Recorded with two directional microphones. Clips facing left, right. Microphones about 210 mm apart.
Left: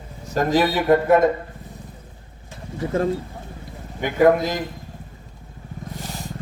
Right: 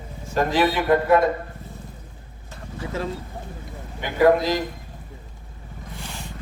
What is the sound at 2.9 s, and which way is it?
A man's voice, 50° left (ahead or behind).